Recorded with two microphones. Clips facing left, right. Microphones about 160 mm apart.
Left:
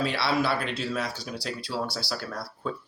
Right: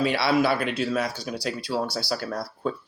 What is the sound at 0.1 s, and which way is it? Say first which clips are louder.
Speech: right 4 dB; 50° right (ahead or behind).